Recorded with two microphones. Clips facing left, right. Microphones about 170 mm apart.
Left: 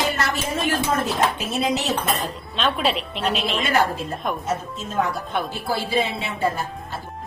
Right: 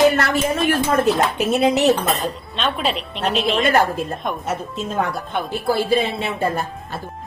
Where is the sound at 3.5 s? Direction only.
50° right (ahead or behind).